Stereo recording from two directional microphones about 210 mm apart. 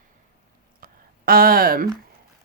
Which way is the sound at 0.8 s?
45° right (ahead or behind).